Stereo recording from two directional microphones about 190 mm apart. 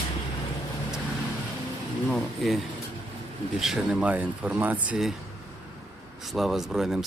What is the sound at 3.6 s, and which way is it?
Speech, centre (ahead or behind).